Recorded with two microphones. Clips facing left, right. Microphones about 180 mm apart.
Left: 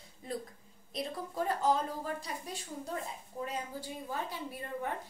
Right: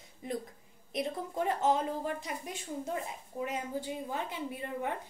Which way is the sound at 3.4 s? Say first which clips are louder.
Right 3 dB; 20° right (ahead or behind).